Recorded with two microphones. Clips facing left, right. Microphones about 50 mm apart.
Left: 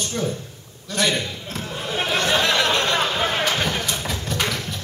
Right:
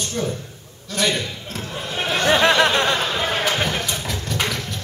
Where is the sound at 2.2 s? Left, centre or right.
Right.